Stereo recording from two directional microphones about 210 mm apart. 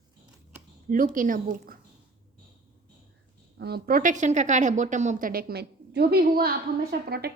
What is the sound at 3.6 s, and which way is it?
A woman's voice, 50° right (ahead or behind).